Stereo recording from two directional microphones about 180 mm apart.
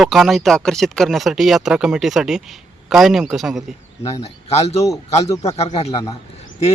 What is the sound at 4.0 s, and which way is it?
A man's voice, 35° left (ahead or behind).